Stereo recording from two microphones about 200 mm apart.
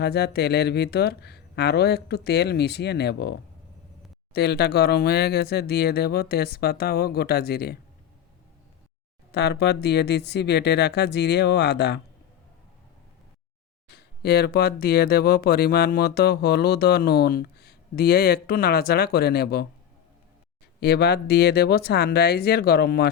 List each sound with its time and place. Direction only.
0.0 s speech: 55° left (ahead or behind)
4.4 s speech: 55° left (ahead or behind)
9.3 s speech: 55° left (ahead or behind)
13.8 s speech: 55° left (ahead or behind)
20.8 s speech: 55° left (ahead or behind)